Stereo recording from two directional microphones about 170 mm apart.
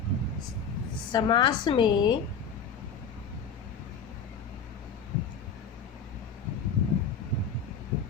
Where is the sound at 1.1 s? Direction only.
25° left (ahead or behind).